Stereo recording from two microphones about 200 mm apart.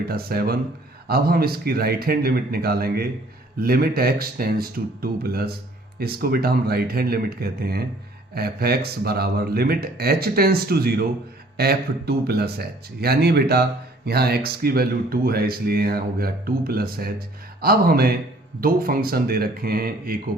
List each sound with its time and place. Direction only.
0.0 s speech: 50° right (ahead or behind)